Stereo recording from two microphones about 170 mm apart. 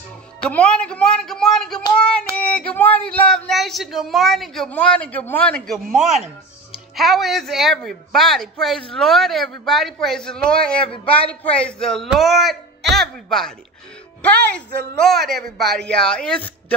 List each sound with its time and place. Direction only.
0.4 s speech: 5° left (ahead or behind)
15.1 s speech: centre (ahead or behind)